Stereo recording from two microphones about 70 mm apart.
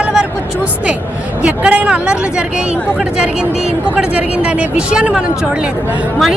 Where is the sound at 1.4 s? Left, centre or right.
Centre.